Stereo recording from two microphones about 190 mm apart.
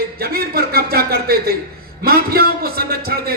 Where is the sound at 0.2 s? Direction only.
55° right (ahead or behind).